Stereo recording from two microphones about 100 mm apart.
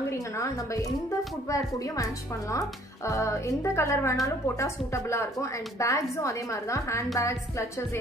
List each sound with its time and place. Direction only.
3.1 s a woman's voice: 30° left (ahead or behind)